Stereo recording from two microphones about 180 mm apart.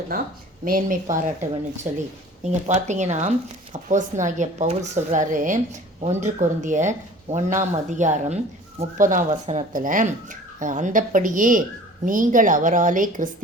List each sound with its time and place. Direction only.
0.1 s speech: 55° right (ahead or behind)